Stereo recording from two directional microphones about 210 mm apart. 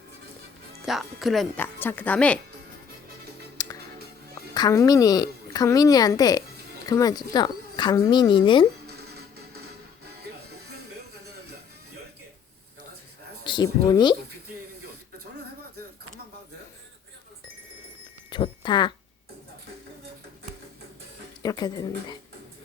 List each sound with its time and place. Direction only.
0.9 s a woman's voice: centre (ahead or behind)
3.6 s music: 15° left (ahead or behind)
4.5 s a woman's voice: 15° left (ahead or behind)
13.4 s speech: 20° left (ahead or behind)
18.3 s a sound: 20° left (ahead or behind)
21.4 s speech: 20° left (ahead or behind)